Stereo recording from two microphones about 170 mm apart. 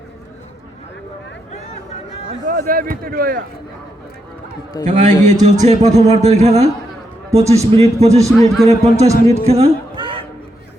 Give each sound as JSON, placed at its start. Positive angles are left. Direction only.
{"t": 2.5, "sound": "speech", "side_deg": -55}
{"t": 4.9, "sound": "a man's voice", "side_deg": -45}
{"t": 8.3, "sound": "a man's voice", "side_deg": 0}
{"t": 8.6, "sound": "speech", "side_deg": -40}
{"t": 9.3, "sound": "a sound", "side_deg": -35}